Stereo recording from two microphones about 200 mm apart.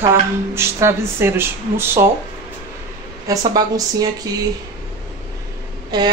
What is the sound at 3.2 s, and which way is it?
Speech, 20° right (ahead or behind).